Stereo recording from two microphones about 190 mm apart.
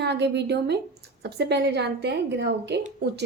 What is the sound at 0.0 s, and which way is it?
A woman's voice, 60° right (ahead or behind).